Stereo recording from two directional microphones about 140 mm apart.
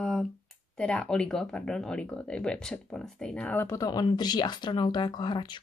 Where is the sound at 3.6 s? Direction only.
25° left (ahead or behind).